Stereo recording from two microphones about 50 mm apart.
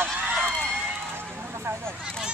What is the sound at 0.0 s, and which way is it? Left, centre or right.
Run, right.